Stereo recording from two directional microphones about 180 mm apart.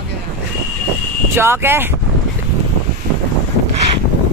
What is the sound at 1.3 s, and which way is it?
Speech, 10° right (ahead or behind).